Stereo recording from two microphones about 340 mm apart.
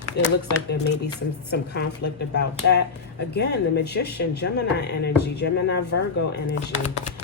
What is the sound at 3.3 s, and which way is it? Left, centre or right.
Speech, left.